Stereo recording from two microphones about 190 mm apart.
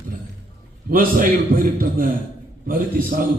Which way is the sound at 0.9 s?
45° right (ahead or behind).